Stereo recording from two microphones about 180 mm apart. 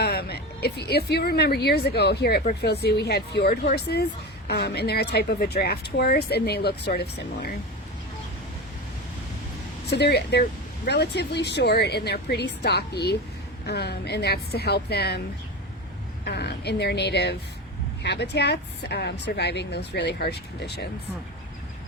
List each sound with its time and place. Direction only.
0.0 s a woman's voice: 60° left (ahead or behind)
9.8 s speech: 65° left (ahead or behind)
16.2 s speech: 65° left (ahead or behind)